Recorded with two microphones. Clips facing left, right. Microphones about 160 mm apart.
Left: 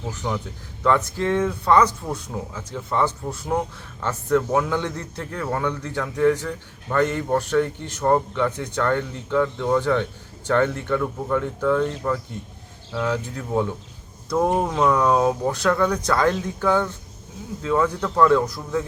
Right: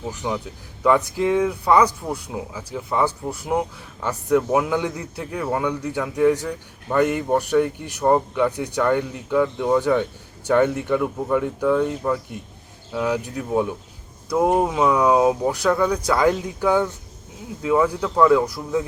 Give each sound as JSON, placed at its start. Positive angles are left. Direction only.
{"t": 0.3, "sound": "a man's voice", "side_deg": -10}
{"t": 14.3, "sound": "speech", "side_deg": 0}
{"t": 16.6, "sound": "a man's voice", "side_deg": -10}